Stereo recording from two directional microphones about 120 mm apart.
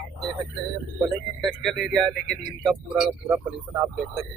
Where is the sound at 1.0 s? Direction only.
Centre (ahead or behind).